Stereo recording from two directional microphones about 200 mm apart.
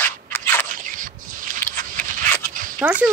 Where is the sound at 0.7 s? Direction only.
40° right (ahead or behind).